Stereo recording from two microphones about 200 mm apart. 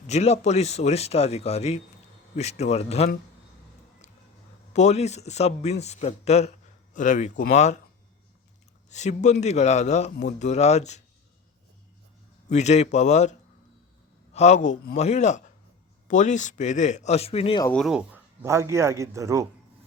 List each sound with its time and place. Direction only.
0.1 s speech: 35° left (ahead or behind)
4.7 s speech: 35° left (ahead or behind)
8.9 s speech: 35° left (ahead or behind)
12.5 s speech: 35° left (ahead or behind)
14.3 s speech: 35° left (ahead or behind)
17.7 s speech: 5° right (ahead or behind)